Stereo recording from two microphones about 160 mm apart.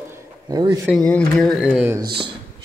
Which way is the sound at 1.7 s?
10° right (ahead or behind).